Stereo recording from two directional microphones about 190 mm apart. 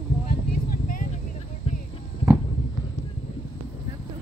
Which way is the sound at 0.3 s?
50° left (ahead or behind).